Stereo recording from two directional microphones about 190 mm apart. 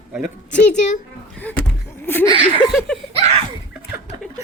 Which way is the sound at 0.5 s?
40° left (ahead or behind).